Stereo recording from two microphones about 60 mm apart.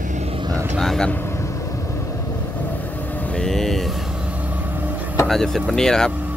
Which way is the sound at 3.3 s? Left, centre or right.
Centre.